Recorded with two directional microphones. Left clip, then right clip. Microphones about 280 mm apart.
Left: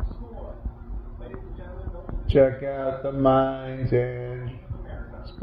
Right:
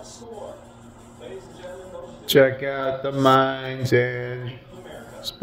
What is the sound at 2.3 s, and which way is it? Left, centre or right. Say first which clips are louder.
Speech: right 2 dB; centre.